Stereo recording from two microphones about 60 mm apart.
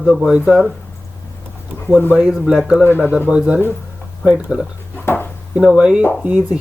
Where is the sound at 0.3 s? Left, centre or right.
Right.